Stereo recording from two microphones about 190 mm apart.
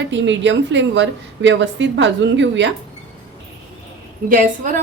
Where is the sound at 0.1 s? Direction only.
70° right (ahead or behind).